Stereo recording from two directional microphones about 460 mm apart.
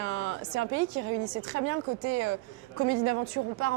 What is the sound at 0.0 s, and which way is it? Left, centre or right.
Speech, right.